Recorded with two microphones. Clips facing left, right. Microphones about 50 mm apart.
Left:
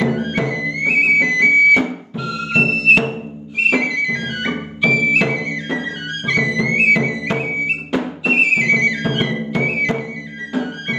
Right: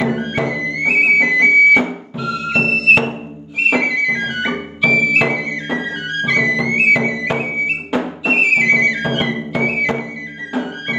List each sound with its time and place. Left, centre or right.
0.0 s music: centre